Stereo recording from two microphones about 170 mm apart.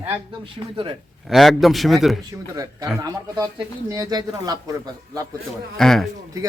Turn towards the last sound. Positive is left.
turn(degrees=0)  # may be behind; listen again after turning